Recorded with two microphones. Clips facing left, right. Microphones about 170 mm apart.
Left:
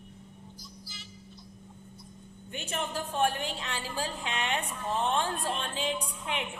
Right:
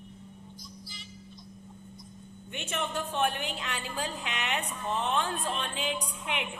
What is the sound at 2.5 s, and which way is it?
A woman's voice, 35° left (ahead or behind).